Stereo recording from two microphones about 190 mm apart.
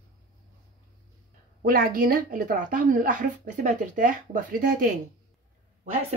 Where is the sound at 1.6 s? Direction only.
50° right (ahead or behind).